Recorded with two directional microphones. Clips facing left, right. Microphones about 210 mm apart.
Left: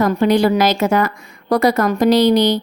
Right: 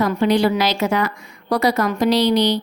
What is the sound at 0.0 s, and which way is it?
A woman's voice, 45° left (ahead or behind).